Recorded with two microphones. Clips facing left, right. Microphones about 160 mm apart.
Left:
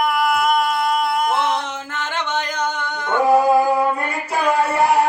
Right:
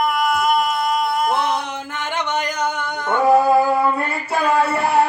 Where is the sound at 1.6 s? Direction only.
10° right (ahead or behind).